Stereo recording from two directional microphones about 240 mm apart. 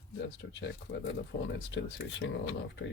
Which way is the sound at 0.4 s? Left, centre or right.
Left.